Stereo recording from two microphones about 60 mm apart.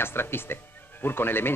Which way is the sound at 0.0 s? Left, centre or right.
Left.